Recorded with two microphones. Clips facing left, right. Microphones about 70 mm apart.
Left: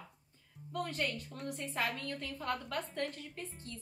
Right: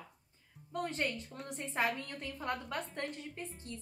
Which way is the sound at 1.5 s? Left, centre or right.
Right.